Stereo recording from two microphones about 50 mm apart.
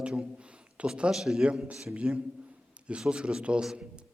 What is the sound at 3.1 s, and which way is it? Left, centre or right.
Speech, centre.